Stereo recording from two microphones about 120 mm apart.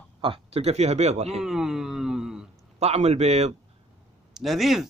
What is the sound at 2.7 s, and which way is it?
Speech, 65° right (ahead or behind).